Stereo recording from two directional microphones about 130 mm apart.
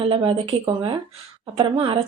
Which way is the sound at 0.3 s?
45° right (ahead or behind).